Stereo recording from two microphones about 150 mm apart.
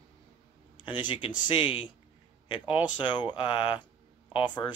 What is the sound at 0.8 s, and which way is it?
Speech, 30° left (ahead or behind).